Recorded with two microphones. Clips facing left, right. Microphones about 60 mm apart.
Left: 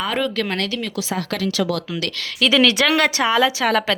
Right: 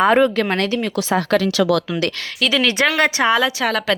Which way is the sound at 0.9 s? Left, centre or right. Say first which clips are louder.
Right 7 dB; right.